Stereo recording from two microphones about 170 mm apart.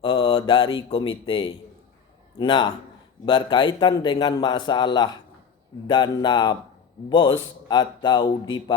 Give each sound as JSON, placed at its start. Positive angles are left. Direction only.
{"t": 0.0, "sound": "mantra", "side_deg": 30}
{"t": 2.4, "sound": "a man's voice", "side_deg": 30}